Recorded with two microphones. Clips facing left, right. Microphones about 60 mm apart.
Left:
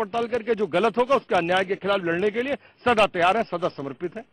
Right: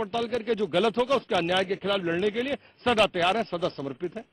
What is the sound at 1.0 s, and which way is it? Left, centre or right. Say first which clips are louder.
A man's voice: left 4 dB; left.